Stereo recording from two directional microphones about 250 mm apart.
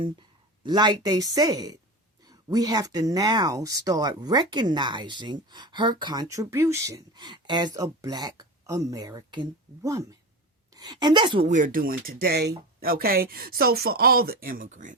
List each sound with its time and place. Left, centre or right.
0.0 s a woman's voice: centre